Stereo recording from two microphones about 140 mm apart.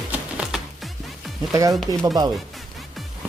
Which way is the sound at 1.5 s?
25° right (ahead or behind).